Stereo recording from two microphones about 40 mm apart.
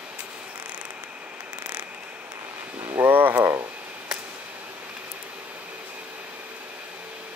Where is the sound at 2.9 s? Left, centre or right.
Right.